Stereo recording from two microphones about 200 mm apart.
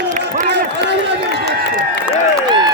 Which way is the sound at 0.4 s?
60° right (ahead or behind).